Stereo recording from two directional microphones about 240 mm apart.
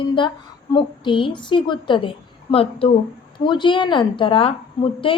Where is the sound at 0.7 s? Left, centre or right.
Centre.